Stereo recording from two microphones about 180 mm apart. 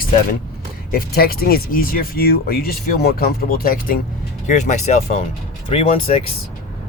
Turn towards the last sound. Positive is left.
turn(degrees=35)  # may be behind; listen again after turning